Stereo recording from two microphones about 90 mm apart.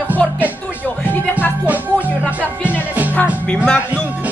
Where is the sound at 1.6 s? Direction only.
15° right (ahead or behind).